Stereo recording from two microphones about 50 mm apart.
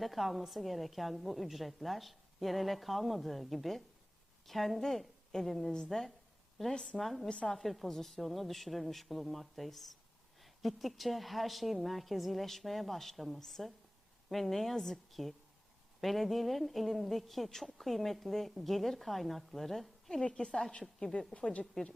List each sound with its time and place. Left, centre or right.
0.0 s a woman's voice: centre
6.7 s a woman's voice: centre
7.0 s a woman's voice: centre
20.2 s a woman's voice: centre
21.3 s speech: left